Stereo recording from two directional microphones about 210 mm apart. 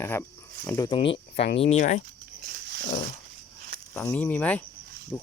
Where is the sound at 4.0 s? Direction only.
10° left (ahead or behind).